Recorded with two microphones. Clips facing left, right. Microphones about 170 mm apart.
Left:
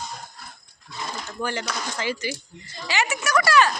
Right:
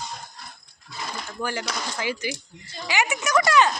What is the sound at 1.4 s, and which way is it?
Speech, 10° right (ahead or behind).